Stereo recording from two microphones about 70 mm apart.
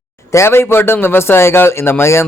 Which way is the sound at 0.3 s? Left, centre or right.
Left.